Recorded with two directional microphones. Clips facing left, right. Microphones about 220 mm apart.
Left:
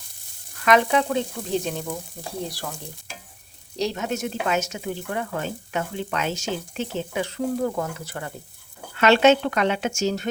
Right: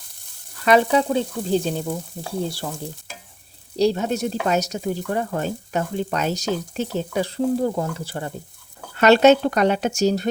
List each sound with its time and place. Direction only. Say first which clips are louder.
0.6 s speech: right 3 dB; 35° right (ahead or behind)
3.8 s speech: right 6 dB; 35° right (ahead or behind)
9.0 s speech: right 3 dB; 40° right (ahead or behind)